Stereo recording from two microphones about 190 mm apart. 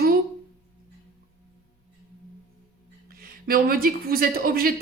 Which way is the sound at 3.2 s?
50° right (ahead or behind).